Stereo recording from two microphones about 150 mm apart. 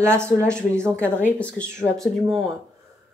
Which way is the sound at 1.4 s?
5° left (ahead or behind).